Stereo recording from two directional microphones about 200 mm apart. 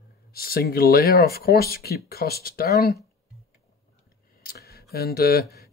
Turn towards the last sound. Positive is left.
turn(degrees=50)  # may be behind; listen again after turning